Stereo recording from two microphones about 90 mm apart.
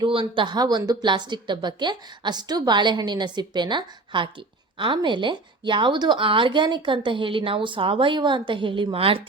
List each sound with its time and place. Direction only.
0.0 s a woman's voice: 75° right (ahead or behind)